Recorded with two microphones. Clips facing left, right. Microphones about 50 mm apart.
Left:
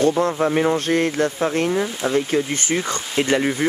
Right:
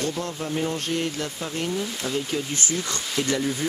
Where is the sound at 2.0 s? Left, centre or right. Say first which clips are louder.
Left 9 dB; left.